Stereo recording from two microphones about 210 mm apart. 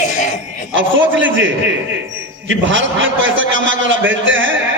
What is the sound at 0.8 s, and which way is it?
Speech, 65° right (ahead or behind).